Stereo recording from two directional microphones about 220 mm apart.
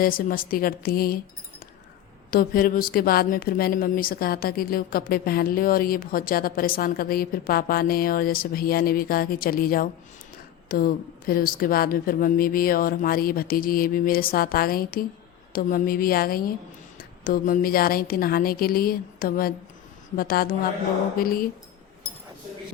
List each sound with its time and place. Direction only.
0.0 s speech: 40° left (ahead or behind)